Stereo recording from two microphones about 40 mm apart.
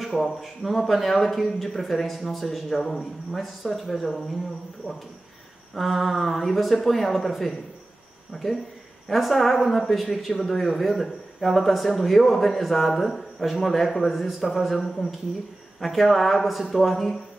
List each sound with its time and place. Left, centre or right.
0.0 s speech: centre
4.8 s speech: left
5.8 s speech: centre